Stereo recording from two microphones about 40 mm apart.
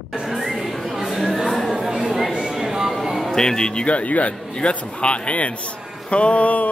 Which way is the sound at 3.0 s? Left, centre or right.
Centre.